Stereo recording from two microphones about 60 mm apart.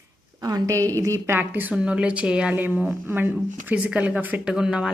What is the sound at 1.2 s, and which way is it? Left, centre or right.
Speech, right.